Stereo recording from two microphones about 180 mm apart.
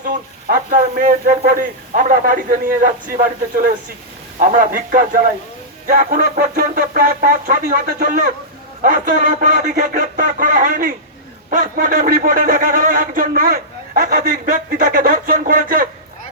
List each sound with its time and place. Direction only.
0.5 s speech: 55° right (ahead or behind)